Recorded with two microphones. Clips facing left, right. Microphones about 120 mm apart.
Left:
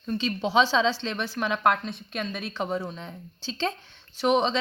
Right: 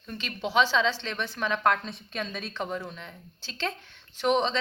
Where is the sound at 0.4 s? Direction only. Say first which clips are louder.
Left 2 dB; 15° left (ahead or behind).